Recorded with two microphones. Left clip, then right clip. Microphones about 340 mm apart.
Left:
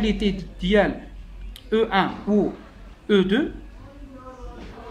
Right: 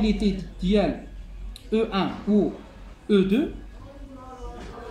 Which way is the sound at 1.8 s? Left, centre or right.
Left.